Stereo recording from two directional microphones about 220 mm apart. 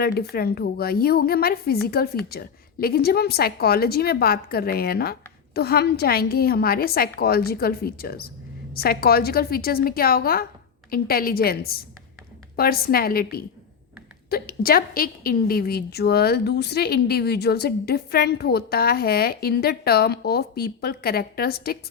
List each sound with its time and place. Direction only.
0.0 s a woman's voice: 45° left (ahead or behind)
14.3 s a woman's voice: 45° left (ahead or behind)